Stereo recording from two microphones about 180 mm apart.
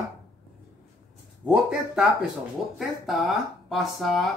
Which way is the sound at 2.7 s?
Centre (ahead or behind).